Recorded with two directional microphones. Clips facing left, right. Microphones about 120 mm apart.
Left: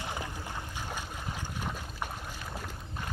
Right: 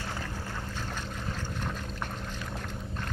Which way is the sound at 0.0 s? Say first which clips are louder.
Even; 15° left (ahead or behind).